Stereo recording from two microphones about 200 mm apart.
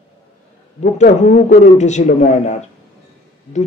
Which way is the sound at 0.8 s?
40° left (ahead or behind).